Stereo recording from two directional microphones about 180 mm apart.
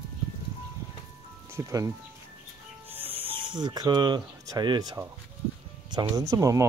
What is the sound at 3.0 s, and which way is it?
Speech, 30° right (ahead or behind).